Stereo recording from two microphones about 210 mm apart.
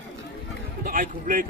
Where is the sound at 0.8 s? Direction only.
40° right (ahead or behind).